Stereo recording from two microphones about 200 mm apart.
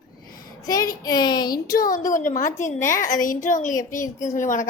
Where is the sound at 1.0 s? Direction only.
20° left (ahead or behind).